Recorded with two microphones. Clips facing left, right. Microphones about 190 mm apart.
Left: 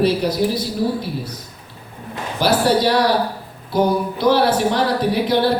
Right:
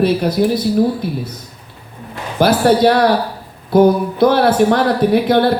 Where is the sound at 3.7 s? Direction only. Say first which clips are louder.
Right 7 dB; 55° right (ahead or behind).